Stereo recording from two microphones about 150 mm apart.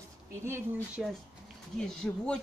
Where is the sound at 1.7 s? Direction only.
5° left (ahead or behind).